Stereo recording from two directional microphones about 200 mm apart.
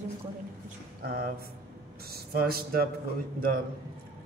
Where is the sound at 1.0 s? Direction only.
45° right (ahead or behind).